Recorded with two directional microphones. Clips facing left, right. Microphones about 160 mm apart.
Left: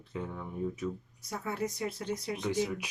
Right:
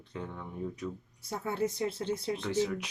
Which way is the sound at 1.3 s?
30° right (ahead or behind).